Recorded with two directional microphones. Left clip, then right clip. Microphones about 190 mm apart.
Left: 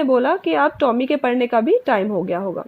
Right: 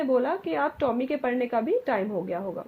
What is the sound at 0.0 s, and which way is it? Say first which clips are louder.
A woman's voice: left 8 dB; 45° left (ahead or behind).